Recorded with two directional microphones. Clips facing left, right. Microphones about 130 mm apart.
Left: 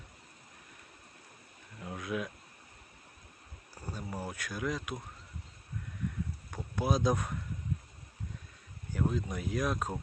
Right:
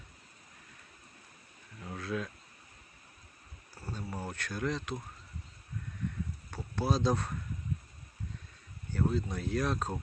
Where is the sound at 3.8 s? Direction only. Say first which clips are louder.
Even; 10° left (ahead or behind).